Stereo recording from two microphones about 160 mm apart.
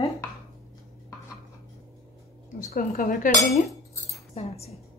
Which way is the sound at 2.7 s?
60° left (ahead or behind).